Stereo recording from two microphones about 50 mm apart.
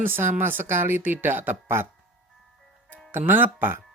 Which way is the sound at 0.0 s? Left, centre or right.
Right.